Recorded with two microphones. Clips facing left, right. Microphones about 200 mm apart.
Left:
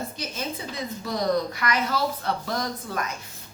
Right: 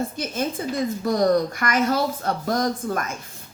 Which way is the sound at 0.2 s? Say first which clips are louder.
Right 6 dB; 50° right (ahead or behind).